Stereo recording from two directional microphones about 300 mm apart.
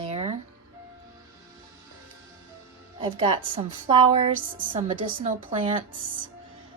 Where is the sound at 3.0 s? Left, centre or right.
Centre.